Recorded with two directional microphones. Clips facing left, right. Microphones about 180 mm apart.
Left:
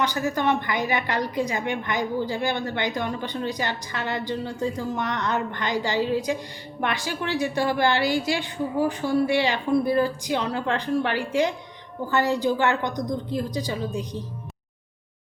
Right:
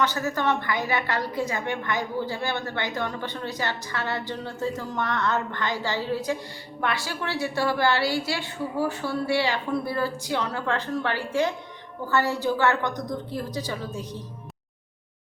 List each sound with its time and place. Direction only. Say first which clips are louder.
0.0 s a woman's voice: left 1 dB; 15° left (ahead or behind)